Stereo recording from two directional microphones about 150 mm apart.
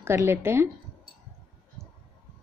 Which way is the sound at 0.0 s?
15° right (ahead or behind).